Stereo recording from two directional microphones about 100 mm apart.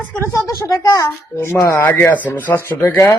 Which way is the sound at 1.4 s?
25° left (ahead or behind).